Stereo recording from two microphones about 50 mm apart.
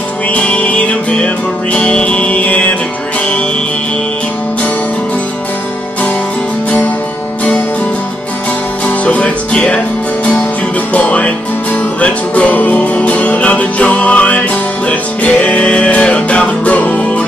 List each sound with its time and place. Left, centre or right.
0.3 s music: left
8.8 s music: left
10.9 s music: left